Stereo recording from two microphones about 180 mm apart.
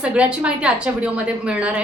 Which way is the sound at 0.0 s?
5° right (ahead or behind).